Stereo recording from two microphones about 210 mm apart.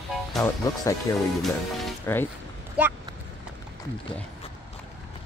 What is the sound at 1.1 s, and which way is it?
Speech, 15° left (ahead or behind).